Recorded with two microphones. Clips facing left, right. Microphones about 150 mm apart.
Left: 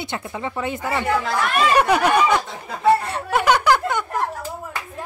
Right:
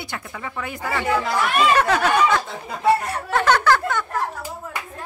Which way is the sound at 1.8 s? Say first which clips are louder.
Left 2 dB; 15° left (ahead or behind).